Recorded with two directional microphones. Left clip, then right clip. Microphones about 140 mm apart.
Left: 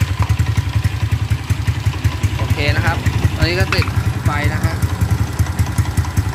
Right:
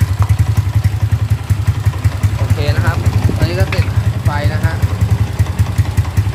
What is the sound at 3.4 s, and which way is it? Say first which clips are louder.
Vehicle: left 2 dB; centre (ahead or behind).